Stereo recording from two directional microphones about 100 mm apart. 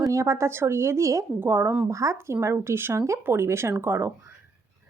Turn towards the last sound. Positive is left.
turn(degrees=-25)  # may be behind; listen again after turning